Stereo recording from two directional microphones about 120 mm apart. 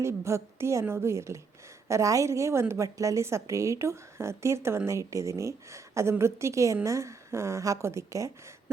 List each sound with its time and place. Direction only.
0.0 s a woman's voice: 25° right (ahead or behind)